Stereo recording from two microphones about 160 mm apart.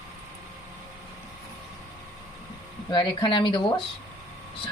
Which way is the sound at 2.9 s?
30° left (ahead or behind).